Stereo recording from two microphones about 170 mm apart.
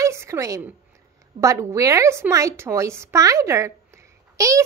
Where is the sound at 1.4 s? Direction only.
20° right (ahead or behind).